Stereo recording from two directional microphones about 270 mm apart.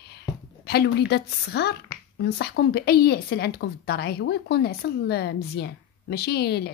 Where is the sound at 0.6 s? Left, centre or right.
Left.